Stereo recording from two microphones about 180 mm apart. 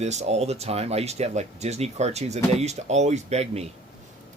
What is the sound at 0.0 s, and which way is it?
Speech, 40° right (ahead or behind).